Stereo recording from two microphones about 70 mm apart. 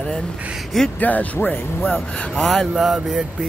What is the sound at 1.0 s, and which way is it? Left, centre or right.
Speech, left.